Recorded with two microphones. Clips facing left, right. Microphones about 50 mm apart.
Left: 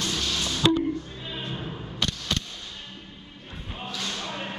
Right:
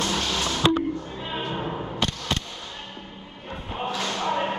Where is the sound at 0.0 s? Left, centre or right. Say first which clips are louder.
Right 3 dB; right.